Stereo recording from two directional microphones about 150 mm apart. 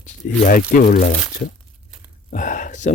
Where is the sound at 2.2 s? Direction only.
60° left (ahead or behind).